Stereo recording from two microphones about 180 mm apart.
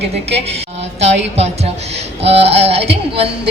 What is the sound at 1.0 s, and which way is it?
A man's voice, 35° right (ahead or behind).